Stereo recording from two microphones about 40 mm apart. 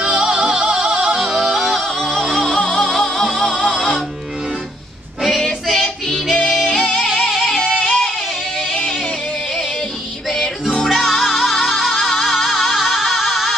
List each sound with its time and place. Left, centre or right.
0.0 s music: centre
1.2 s music: centre
2.5 s music: centre
5.4 s female singing: centre
6.3 s yodeling: centre
6.7 s music: centre
10.8 s music: centre